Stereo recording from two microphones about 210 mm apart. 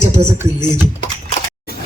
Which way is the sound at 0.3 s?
10° right (ahead or behind).